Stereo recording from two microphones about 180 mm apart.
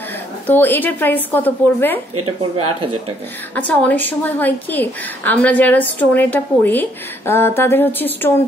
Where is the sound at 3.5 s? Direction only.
10° left (ahead or behind).